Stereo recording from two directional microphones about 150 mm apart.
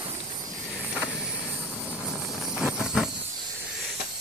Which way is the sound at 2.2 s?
Centre (ahead or behind).